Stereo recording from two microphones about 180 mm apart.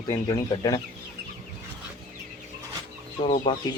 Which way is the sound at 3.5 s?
25° left (ahead or behind).